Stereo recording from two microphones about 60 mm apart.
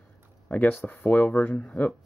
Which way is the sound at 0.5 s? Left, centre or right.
Left.